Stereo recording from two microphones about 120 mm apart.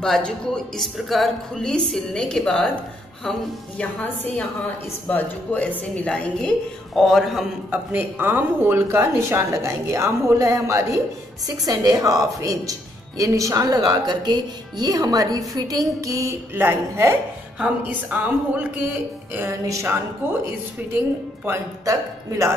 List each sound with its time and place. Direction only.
0.0 s a woman's voice: 5° left (ahead or behind)
7.7 s speech: 15° right (ahead or behind)